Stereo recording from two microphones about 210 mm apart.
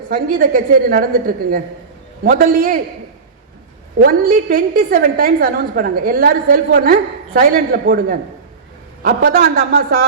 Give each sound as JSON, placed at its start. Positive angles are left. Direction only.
{"t": 0.1, "sound": "a woman's voice", "side_deg": -40}
{"t": 4.0, "sound": "a woman's voice", "side_deg": -45}